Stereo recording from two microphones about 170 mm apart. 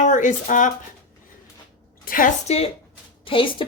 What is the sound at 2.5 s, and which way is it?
A woman's voice, 35° left (ahead or behind).